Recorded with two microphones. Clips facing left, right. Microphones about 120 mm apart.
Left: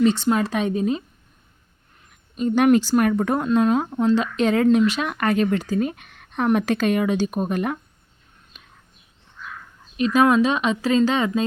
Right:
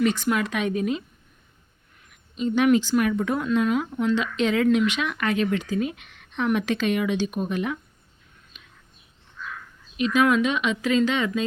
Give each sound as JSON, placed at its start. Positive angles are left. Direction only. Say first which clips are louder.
{"t": 0.0, "sound": "speech", "louder": "left 4 dB", "side_deg": 30}
{"t": 2.3, "sound": "speech", "louder": "left 3 dB", "side_deg": 45}
{"t": 8.5, "sound": "whispering", "louder": "left 2 dB", "side_deg": 40}
{"t": 10.0, "sound": "speech", "louder": "left 3 dB", "side_deg": 35}